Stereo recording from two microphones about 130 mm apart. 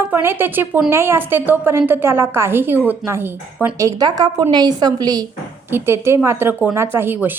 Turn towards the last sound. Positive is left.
turn(degrees=-15)  # may be behind; listen again after turning